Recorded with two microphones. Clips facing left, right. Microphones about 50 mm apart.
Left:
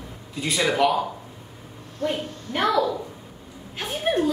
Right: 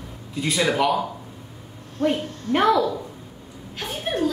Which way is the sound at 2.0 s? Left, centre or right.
Right.